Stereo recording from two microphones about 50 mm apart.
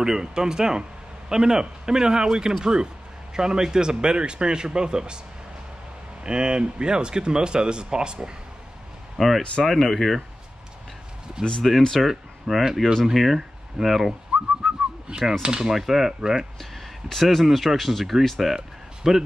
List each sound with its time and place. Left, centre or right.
0.0 s speech: centre
6.2 s speech: centre
9.2 s speech: centre
11.6 s speech: centre
14.3 s whistling: centre
15.4 s speech: centre
16.5 s speech: centre
18.6 s a sound: centre